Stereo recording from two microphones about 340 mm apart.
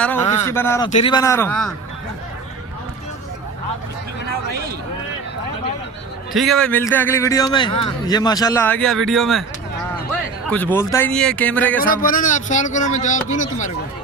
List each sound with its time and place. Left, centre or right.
0.0 s a sound: centre
0.9 s a man's voice: centre
6.3 s a man's voice: centre
10.5 s speech: centre
11.8 s speech: left